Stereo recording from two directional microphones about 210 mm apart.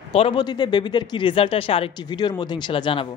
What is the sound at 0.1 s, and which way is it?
Speech, 25° left (ahead or behind).